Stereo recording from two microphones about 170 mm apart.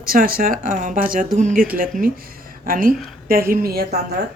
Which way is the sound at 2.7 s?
55° right (ahead or behind).